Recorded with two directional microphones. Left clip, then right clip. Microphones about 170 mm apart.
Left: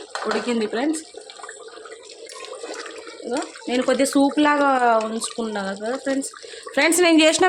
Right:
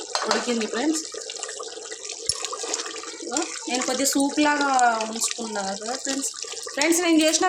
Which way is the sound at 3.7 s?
45° left (ahead or behind).